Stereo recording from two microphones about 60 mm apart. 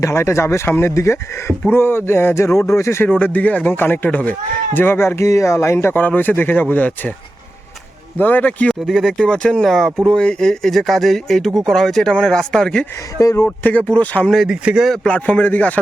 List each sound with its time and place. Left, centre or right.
0.0 s speech: left
2.6 s speech: left
3.0 s a man's voice: left
5.9 s a man's voice: left
8.2 s speech: left
9.0 s speech: centre
10.1 s speech: centre
13.1 s speech: left
13.6 s speech: left
14.4 s speech: centre
15.3 s speech: left